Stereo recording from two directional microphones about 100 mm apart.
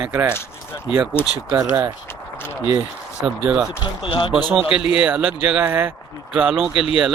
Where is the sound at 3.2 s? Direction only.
10° right (ahead or behind).